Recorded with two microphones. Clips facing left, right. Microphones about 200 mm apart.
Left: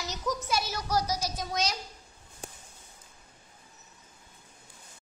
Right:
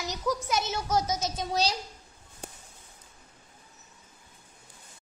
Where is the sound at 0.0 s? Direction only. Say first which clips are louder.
Right 3 dB; 15° right (ahead or behind); by 1.8 s 30° right (ahead or behind).